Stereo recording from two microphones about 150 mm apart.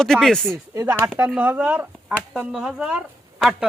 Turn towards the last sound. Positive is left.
turn(degrees=-5)  # may be behind; listen again after turning